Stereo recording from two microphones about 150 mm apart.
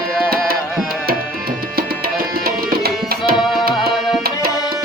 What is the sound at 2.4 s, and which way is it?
Tabla, 90° right.